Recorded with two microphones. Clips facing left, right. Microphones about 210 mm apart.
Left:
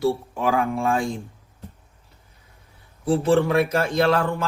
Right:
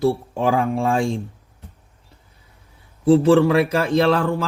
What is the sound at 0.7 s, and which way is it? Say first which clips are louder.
Speech: right 3 dB; 30° right (ahead or behind).